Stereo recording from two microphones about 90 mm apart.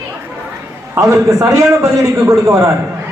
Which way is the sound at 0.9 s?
35° right (ahead or behind).